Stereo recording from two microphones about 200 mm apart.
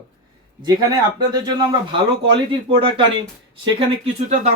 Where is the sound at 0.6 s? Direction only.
20° right (ahead or behind).